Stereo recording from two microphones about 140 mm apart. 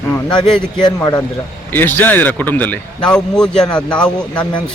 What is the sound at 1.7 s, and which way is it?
Speech, 15° left (ahead or behind).